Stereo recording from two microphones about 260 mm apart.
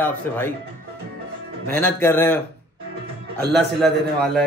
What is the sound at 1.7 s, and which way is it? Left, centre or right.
Speech, centre.